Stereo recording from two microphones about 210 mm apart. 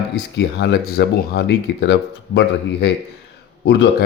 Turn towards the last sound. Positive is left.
turn(degrees=55)  # may be behind; listen again after turning